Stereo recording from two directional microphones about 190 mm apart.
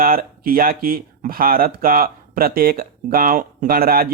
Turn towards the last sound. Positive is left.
turn(degrees=-50)  # may be behind; listen again after turning